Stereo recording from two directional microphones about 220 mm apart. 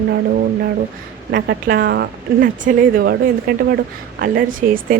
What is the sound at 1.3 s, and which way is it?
A woman's voice, 50° right (ahead or behind).